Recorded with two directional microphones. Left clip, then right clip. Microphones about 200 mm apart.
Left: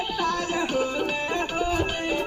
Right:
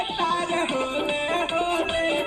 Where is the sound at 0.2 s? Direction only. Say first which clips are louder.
Right 3 dB; 35° right (ahead or behind).